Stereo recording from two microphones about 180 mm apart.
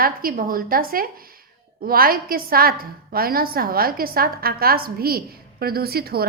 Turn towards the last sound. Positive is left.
turn(degrees=-60)  # may be behind; listen again after turning